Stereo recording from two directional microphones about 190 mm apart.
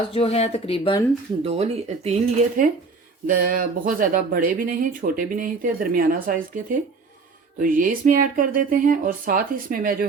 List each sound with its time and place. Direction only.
0.1 s speech: 30° left (ahead or behind)
1.5 s speech: 35° right (ahead or behind)
3.2 s speech: 45° right (ahead or behind)